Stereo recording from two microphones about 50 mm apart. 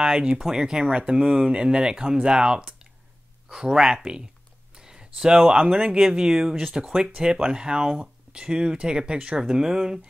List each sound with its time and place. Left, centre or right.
0.0 s speech: centre